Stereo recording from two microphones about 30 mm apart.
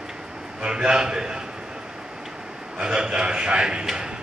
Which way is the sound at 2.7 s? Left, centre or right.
Right.